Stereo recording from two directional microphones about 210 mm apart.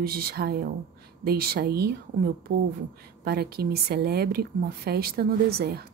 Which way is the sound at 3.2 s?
50° right (ahead or behind).